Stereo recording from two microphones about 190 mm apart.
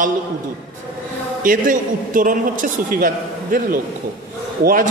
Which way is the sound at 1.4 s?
45° right (ahead or behind).